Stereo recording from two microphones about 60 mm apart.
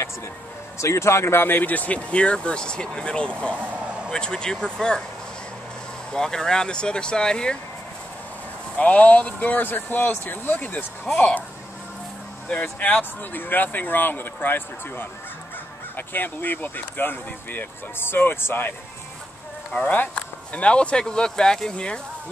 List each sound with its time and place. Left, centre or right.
0.7 s speech: left; by 3.3 s centre
3.5 s a sound: right
4.1 s speech: centre
6.1 s speech: centre
8.7 s speech: left
12.7 s speech: left
19.8 s speech: left